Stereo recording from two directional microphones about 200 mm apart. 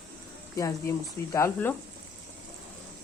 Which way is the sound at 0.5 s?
15° left (ahead or behind).